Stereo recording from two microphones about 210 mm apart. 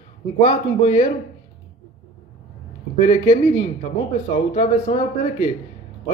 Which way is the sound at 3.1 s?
35° left (ahead or behind).